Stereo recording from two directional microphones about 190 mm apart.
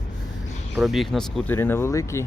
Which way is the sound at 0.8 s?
Centre (ahead or behind).